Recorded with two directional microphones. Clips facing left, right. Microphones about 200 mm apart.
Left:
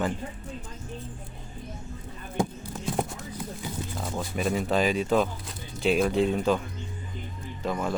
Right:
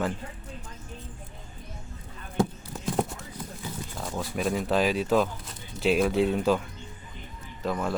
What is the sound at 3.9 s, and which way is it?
Speech, centre (ahead or behind).